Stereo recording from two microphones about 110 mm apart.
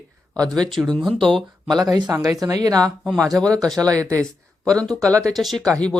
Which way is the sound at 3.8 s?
30° right (ahead or behind).